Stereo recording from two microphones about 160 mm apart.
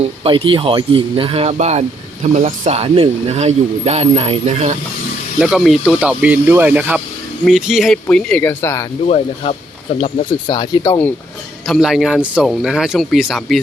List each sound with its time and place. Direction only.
0.3 s speech: 30° right (ahead or behind)
5.4 s speech: centre (ahead or behind); by 8.9 s 15° left (ahead or behind)
9.0 s speech: 40° left (ahead or behind)
10.0 s speech: 25° left (ahead or behind)
11.6 s speech: centre (ahead or behind)